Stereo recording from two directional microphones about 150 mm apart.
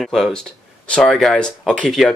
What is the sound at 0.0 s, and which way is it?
Speech, 5° left (ahead or behind).